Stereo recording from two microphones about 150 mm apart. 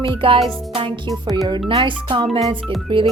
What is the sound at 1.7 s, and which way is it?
A woman's voice, 35° right (ahead or behind).